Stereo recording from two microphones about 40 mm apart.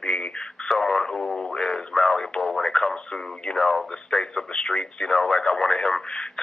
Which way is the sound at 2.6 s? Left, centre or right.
Centre.